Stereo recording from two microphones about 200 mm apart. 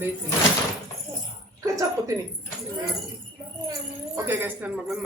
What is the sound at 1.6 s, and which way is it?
Speech, 15° right (ahead or behind).